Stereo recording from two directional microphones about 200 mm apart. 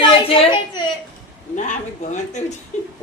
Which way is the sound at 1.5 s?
35° left (ahead or behind).